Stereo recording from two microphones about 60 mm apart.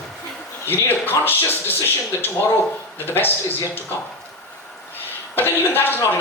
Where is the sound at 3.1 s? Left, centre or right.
Left.